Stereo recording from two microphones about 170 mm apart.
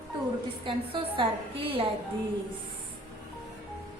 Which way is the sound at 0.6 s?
30° right (ahead or behind).